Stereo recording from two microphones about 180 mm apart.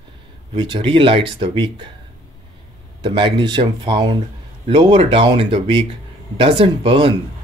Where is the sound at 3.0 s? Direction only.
25° right (ahead or behind).